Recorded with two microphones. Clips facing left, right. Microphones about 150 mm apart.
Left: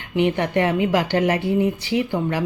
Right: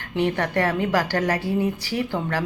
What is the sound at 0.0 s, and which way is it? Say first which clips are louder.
A woman's voice: left 3 dB; 15° left (ahead or behind).